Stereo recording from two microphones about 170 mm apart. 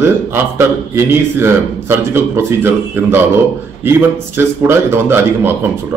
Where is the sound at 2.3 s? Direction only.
15° right (ahead or behind).